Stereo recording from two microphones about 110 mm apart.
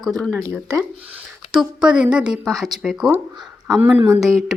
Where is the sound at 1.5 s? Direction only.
5° right (ahead or behind).